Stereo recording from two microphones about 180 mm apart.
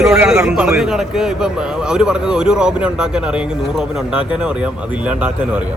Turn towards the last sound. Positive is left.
turn(degrees=-10)  # may be behind; listen again after turning